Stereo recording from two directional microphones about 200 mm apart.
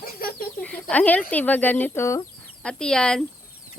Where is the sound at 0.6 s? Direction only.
5° left (ahead or behind).